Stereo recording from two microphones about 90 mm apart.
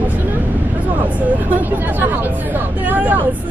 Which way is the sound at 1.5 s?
20° right (ahead or behind).